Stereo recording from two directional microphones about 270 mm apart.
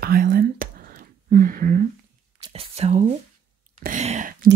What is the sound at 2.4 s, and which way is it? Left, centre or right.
Speech, right.